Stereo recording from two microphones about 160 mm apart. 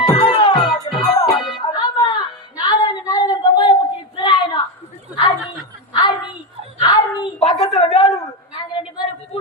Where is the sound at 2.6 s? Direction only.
25° left (ahead or behind).